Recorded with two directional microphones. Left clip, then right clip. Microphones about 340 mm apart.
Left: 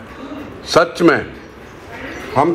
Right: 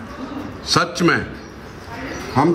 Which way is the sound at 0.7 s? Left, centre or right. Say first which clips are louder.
Left 5 dB; centre.